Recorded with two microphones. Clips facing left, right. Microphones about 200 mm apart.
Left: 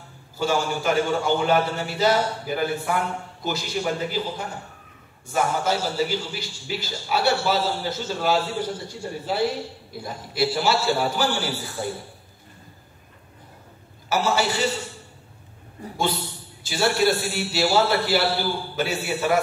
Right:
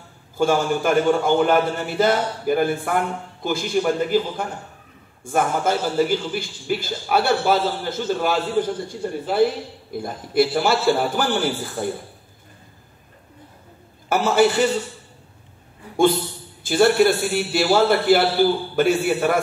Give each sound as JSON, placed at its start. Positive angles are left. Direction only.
{"t": 0.4, "sound": "a man's voice", "side_deg": -50}
{"t": 14.0, "sound": "a man's voice", "side_deg": -50}
{"t": 15.8, "sound": "a man's voice", "side_deg": 40}
{"t": 16.6, "sound": "a man's voice", "side_deg": -55}